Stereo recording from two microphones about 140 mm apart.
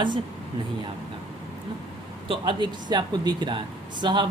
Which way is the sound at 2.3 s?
35° right (ahead or behind).